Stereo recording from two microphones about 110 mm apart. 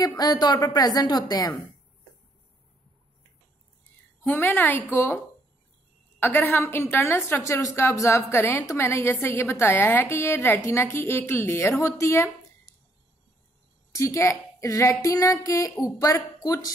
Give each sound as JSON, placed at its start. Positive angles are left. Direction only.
{"t": 0.0, "sound": "a woman's voice", "side_deg": 40}
{"t": 4.2, "sound": "a woman's voice", "side_deg": 20}
{"t": 13.9, "sound": "a woman's voice", "side_deg": 25}